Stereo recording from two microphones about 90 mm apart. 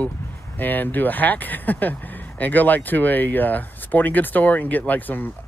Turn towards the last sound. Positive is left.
turn(degrees=20)  # may be behind; listen again after turning